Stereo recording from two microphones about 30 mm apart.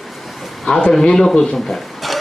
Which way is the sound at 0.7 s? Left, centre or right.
Left.